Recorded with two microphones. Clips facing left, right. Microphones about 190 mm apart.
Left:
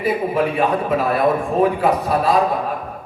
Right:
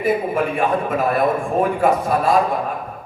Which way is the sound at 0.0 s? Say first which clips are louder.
Even; 50° right (ahead or behind).